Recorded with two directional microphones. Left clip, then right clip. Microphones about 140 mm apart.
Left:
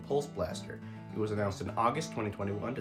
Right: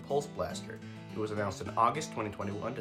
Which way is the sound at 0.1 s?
20° right (ahead or behind).